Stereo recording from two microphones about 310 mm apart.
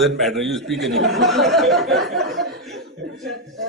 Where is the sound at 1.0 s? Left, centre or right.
Right.